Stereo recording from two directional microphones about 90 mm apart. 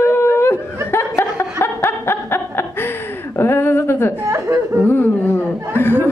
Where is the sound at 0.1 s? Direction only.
25° left (ahead or behind).